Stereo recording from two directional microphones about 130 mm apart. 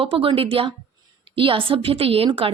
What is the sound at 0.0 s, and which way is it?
A woman's voice, 45° right (ahead or behind).